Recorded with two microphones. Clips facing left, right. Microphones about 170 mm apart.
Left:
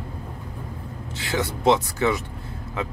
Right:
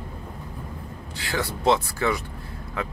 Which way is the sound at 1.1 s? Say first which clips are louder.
Left 2 dB; 20° left (ahead or behind).